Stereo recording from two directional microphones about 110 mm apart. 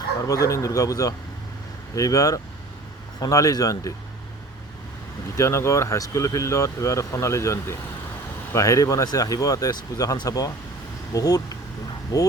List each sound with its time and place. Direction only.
0.3 s speech: 30° left (ahead or behind)
5.4 s speech: 25° left (ahead or behind)